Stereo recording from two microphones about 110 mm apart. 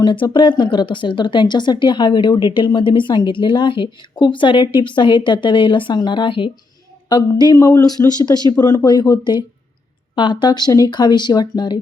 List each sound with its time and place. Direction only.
0.0 s speech: 50° left (ahead or behind)